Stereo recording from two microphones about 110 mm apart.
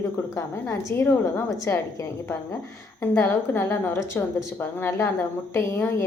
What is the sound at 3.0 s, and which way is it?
A woman's voice, 20° left (ahead or behind).